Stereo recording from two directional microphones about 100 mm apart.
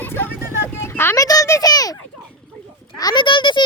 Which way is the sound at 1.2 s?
35° left (ahead or behind).